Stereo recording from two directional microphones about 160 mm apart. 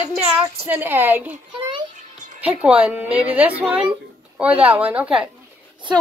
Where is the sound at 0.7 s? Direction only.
10° right (ahead or behind).